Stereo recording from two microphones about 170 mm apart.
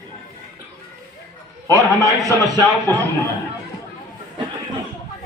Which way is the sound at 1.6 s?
20° right (ahead or behind).